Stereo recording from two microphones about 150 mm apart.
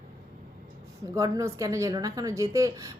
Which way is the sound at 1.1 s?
25° right (ahead or behind).